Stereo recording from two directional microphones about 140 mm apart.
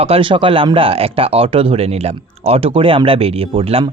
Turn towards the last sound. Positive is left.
turn(degrees=-40)  # may be behind; listen again after turning